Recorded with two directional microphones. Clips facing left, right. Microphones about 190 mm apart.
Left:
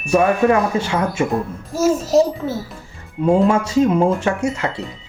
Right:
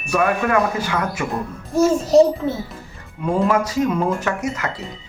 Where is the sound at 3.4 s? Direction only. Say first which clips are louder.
Left 3 dB; 25° left (ahead or behind).